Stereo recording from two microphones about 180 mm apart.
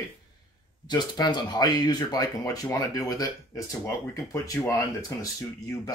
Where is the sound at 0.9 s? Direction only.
25° left (ahead or behind).